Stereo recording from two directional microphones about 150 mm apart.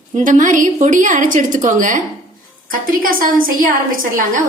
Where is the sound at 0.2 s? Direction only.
60° right (ahead or behind).